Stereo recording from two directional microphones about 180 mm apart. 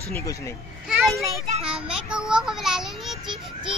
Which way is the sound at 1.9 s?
5° right (ahead or behind).